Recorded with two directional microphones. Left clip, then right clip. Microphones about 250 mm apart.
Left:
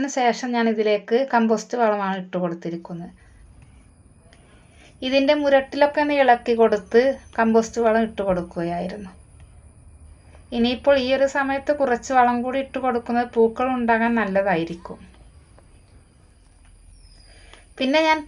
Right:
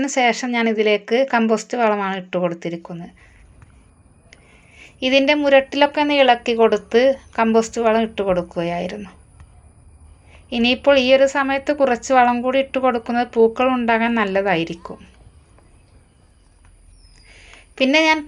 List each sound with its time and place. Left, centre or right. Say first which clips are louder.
0.0 s a woman's voice: right 3 dB; right
4.9 s a woman's voice: right 3 dB; right
10.5 s a woman's voice: right 4 dB; right
17.3 s a sound: right 6 dB; right